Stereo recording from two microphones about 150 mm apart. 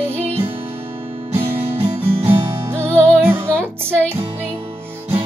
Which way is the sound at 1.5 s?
40° right (ahead or behind).